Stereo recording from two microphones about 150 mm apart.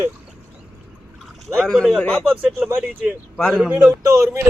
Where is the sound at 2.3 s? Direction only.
5° right (ahead or behind).